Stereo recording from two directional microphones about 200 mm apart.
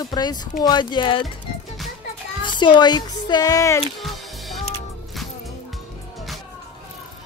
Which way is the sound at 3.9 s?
Centre (ahead or behind).